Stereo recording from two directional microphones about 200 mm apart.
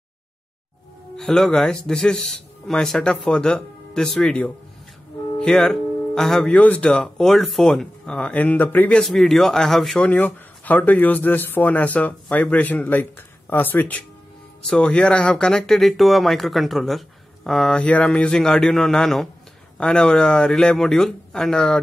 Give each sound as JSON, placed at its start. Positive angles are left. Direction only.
{"t": 1.1, "sound": "speech", "side_deg": 0}